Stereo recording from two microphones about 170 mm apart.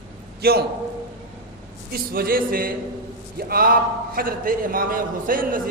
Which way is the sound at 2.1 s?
60° right (ahead or behind).